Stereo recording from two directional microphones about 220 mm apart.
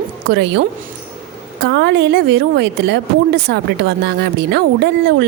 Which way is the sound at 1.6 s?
50° right (ahead or behind).